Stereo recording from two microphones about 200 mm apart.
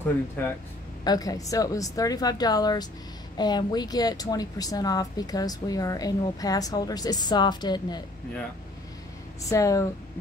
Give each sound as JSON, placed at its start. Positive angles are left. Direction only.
{"t": 0.4, "sound": "speech", "side_deg": 10}
{"t": 9.4, "sound": "speech", "side_deg": 15}